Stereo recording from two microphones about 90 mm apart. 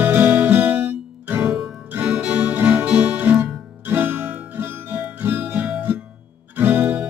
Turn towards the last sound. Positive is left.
turn(degrees=-20)  # may be behind; listen again after turning